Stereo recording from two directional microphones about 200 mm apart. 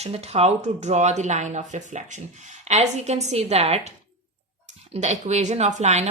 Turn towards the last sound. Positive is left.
turn(degrees=-35)  # may be behind; listen again after turning